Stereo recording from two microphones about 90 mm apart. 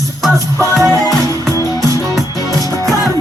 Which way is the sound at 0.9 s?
45° right (ahead or behind).